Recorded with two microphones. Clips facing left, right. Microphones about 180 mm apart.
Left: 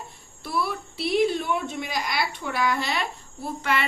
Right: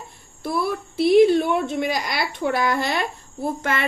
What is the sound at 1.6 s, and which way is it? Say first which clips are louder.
A woman's voice: right 6 dB; 50° right (ahead or behind).